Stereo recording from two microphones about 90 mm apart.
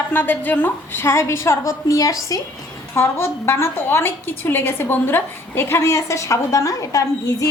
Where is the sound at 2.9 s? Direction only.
25° left (ahead or behind).